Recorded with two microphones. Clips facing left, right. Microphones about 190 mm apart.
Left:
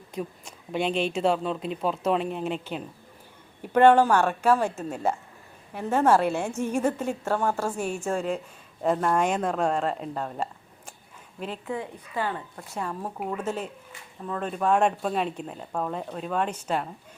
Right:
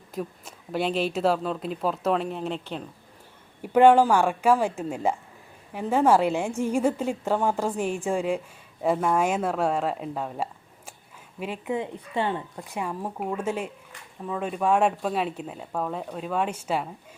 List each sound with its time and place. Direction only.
0.1 s speech: 5° right (ahead or behind)
3.6 s speech: 10° right (ahead or behind)
11.6 s speech: 20° right (ahead or behind)